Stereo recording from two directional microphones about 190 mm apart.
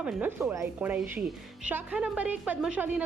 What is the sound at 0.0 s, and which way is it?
A woman's voice, 5° right (ahead or behind).